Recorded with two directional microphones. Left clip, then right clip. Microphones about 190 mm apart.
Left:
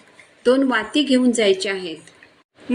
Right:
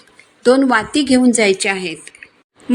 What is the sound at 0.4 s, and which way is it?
A woman's voice, 40° right (ahead or behind).